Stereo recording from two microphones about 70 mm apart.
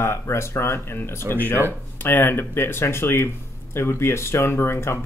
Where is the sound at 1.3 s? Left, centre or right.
Left.